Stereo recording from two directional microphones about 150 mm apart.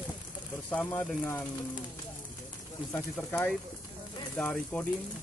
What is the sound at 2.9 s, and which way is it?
Speech, 15° left (ahead or behind).